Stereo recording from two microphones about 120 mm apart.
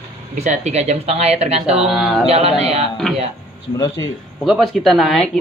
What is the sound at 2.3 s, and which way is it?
Speech, 60° right (ahead or behind).